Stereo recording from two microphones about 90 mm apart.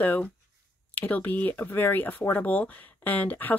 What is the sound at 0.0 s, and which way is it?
Speech, 20° left (ahead or behind).